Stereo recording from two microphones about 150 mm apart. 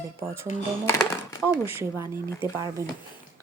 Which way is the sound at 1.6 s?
15° right (ahead or behind).